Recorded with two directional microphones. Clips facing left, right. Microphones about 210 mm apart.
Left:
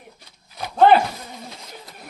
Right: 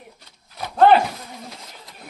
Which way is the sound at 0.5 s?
Centre (ahead or behind).